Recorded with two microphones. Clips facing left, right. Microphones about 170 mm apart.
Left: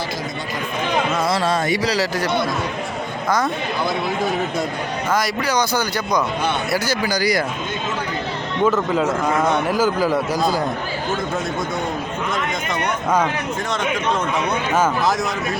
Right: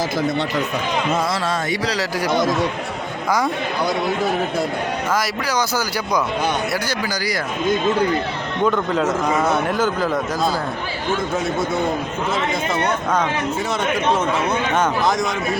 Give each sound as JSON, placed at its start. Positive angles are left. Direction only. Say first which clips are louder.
{"t": 1.7, "sound": "a man's voice", "louder": "left 2 dB", "side_deg": 10}
{"t": 5.1, "sound": "a man's voice", "louder": "left 3 dB", "side_deg": -5}
{"t": 7.1, "sound": "speech", "louder": "left 4 dB", "side_deg": 20}
{"t": 8.6, "sound": "a man's voice", "louder": "left 1 dB", "side_deg": 5}
{"t": 9.7, "sound": "a man's voice", "louder": "left 2 dB", "side_deg": 5}
{"t": 14.7, "sound": "a man's voice", "louder": "left 2 dB", "side_deg": 5}